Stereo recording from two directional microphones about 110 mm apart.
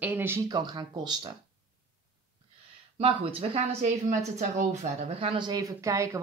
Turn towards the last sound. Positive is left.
turn(degrees=-30)  # may be behind; listen again after turning